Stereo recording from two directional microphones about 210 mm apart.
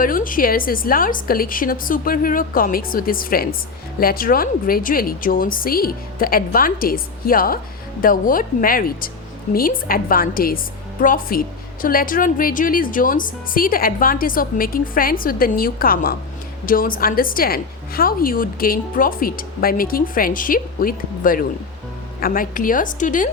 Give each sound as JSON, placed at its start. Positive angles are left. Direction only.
{"t": 0.0, "sound": "a woman's voice", "side_deg": 40}